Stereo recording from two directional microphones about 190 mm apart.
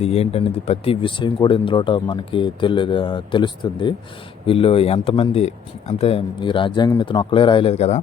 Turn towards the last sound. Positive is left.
turn(degrees=35)  # may be behind; listen again after turning